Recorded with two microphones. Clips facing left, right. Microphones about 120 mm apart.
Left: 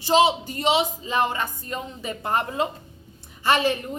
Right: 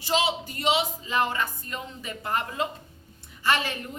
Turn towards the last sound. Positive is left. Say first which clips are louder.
# left 5 dB
turn(degrees=25)  # may be behind; listen again after turning